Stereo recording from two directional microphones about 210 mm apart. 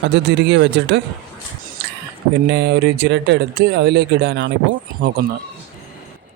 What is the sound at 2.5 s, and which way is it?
Speech, 55° right (ahead or behind).